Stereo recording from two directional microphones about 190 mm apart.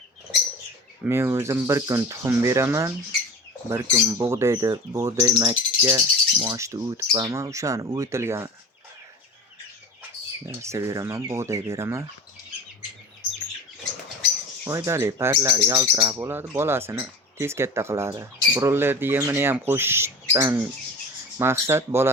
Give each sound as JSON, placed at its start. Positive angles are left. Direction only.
{"t": 1.0, "sound": "speech", "side_deg": -15}
{"t": 10.4, "sound": "speech", "side_deg": -15}
{"t": 14.6, "sound": "speech", "side_deg": -20}